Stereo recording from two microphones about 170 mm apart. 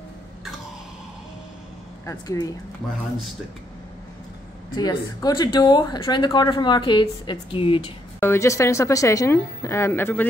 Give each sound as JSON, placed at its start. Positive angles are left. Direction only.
{"t": 2.0, "sound": "speech", "side_deg": 20}
{"t": 4.7, "sound": "speech", "side_deg": 25}
{"t": 8.2, "sound": "a woman's voice", "side_deg": 15}